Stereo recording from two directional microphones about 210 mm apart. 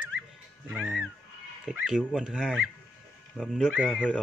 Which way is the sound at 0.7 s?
5° right (ahead or behind).